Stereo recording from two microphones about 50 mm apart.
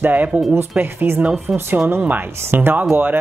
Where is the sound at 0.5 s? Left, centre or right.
Right.